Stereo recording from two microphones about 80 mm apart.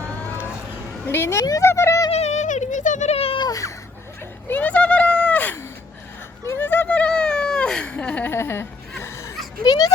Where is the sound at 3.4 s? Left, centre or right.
Left.